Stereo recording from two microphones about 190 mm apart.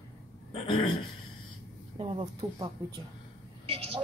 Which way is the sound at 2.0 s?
25° right (ahead or behind).